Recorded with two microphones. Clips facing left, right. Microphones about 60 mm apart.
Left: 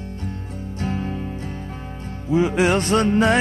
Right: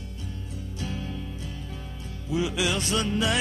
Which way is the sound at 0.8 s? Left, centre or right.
Left.